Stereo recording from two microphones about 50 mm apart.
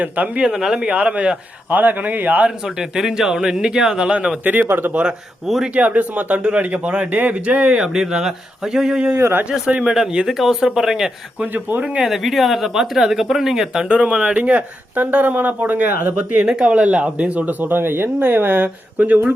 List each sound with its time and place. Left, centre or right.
0.0 s speech: right
0.4 s speech: centre
1.7 s speech: right
2.6 s speech: centre
4.4 s speech: right
5.7 s speech: right
9.4 s speech: right
9.8 s speech: centre
11.8 s speech: right
12.0 s speech: centre
13.8 s speech: right